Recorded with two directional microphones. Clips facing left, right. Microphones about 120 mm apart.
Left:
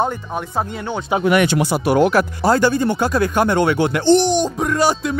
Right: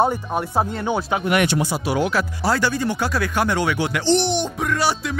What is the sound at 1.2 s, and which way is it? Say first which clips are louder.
Speech: left 7 dB; 70° left (ahead or behind).